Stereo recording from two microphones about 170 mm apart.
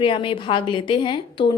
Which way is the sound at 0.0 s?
30° left (ahead or behind).